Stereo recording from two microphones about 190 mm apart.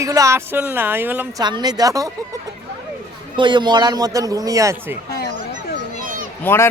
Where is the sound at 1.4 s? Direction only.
20° right (ahead or behind).